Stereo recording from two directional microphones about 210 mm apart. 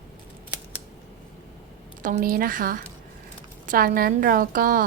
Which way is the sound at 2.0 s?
40° right (ahead or behind).